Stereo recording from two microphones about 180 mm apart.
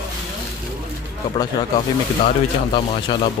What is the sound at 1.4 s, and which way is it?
Speech, 25° left (ahead or behind).